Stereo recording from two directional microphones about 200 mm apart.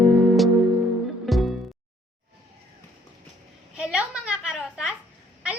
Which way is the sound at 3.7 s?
5° right (ahead or behind).